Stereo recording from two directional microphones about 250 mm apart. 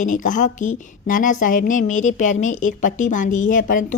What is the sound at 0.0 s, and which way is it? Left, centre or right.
A woman's voice, left.